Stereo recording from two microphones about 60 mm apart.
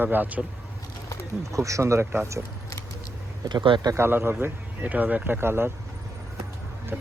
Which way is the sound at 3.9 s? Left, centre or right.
Right.